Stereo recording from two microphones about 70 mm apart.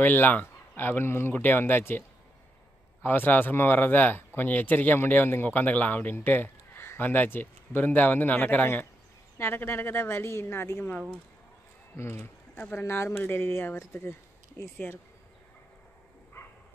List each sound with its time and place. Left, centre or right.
0.0 s a woman's voice: left
9.4 s a woman's voice: left
12.0 s a woman's voice: left